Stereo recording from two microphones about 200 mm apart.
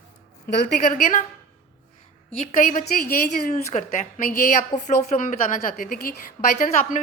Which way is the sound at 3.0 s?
40° left (ahead or behind).